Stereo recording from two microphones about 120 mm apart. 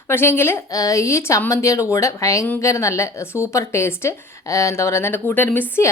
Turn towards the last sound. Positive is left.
turn(degrees=20)  # may be behind; listen again after turning